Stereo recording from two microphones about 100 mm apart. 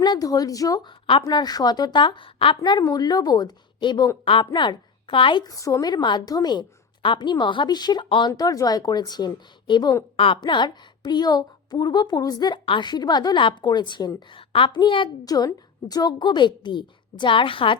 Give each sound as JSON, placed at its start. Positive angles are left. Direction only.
{"t": 0.0, "sound": "speech", "side_deg": 40}
{"t": 1.2, "sound": "a woman's voice", "side_deg": 45}
{"t": 2.6, "sound": "a woman's voice", "side_deg": 40}
{"t": 5.5, "sound": "a woman's voice", "side_deg": 35}
{"t": 8.3, "sound": "a woman's voice", "side_deg": 35}
{"t": 10.2, "sound": "a woman's voice", "side_deg": 55}
{"t": 12.6, "sound": "a woman's voice", "side_deg": 50}
{"t": 14.3, "sound": "a woman's voice", "side_deg": 60}
{"t": 15.2, "sound": "a woman's voice", "side_deg": 40}